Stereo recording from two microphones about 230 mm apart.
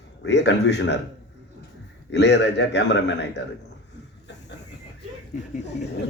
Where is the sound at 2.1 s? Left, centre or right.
Left.